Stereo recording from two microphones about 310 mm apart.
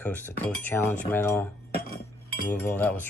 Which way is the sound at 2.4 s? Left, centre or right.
Centre.